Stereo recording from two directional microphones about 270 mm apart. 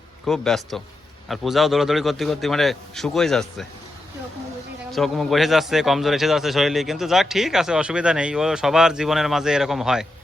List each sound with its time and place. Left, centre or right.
0.3 s speech: centre
4.9 s speech: centre